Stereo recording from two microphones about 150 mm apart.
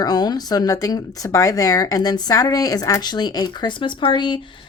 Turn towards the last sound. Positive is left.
turn(degrees=30)  # may be behind; listen again after turning